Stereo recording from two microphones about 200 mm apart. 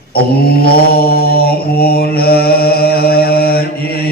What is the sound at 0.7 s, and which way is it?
Mantra, 50° left (ahead or behind).